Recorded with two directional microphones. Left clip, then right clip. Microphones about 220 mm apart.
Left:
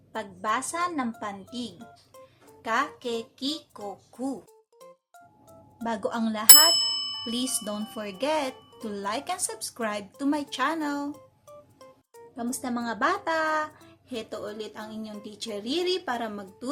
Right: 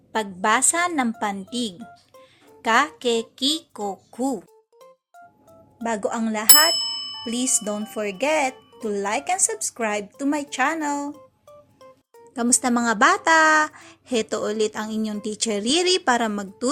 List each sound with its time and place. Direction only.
0.1 s a woman's voice: 30° right (ahead or behind)
5.8 s speech: 20° right (ahead or behind)
6.7 s ding: centre (ahead or behind)
7.6 s speech: 20° right (ahead or behind)
11.1 s music: centre (ahead or behind)
12.4 s a woman's voice: 35° right (ahead or behind)